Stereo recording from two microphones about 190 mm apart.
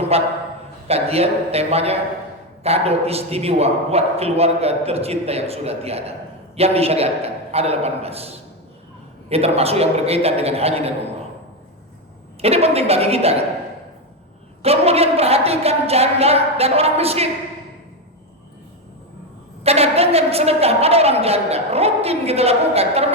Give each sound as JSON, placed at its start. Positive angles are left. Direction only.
{"t": 0.1, "sound": "a man's voice", "side_deg": -30}
{"t": 12.4, "sound": "a man's voice", "side_deg": -30}
{"t": 14.6, "sound": "a man's voice", "side_deg": -30}
{"t": 19.6, "sound": "a man's voice", "side_deg": -30}